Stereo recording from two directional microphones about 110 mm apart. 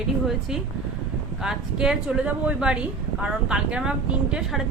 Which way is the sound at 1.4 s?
5° right (ahead or behind).